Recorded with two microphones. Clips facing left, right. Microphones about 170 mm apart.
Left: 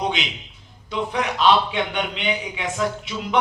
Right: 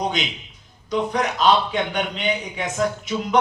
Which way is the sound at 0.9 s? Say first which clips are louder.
Right 2 dB; 40° right (ahead or behind).